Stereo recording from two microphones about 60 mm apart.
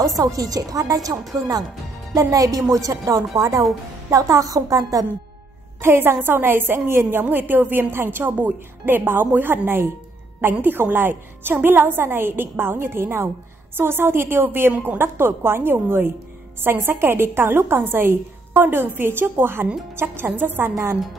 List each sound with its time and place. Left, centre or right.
0.2 s speech: right
2.7 s a woman's voice: right
5.8 s a woman's voice: right